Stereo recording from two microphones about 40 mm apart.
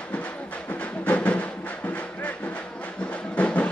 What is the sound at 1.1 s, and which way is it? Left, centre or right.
Music, left.